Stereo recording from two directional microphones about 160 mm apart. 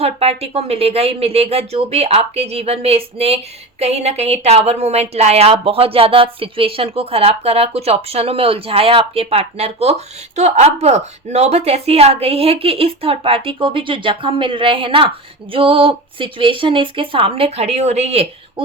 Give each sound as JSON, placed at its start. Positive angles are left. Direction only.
{"t": 0.0, "sound": "speech", "side_deg": -40}